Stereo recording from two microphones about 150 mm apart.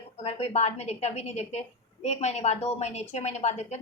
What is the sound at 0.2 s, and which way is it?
A woman's voice, 45° left (ahead or behind).